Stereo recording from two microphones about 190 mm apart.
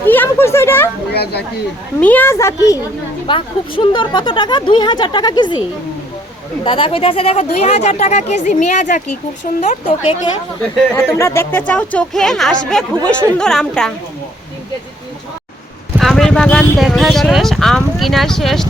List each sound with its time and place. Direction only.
0.0 s a sound: 10° left (ahead or behind)
1.1 s speech: 60° left (ahead or behind)
2.0 s speech: 10° left (ahead or behind)
6.7 s speech: 25° left (ahead or behind)
10.9 s speech: 15° left (ahead or behind)
16.0 s speech: centre (ahead or behind)